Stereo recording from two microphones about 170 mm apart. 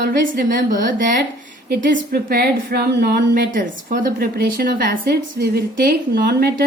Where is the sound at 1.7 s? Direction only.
65° right (ahead or behind).